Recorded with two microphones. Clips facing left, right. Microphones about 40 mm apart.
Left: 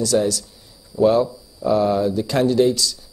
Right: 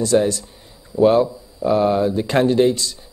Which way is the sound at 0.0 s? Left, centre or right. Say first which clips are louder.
Right 2 dB; right.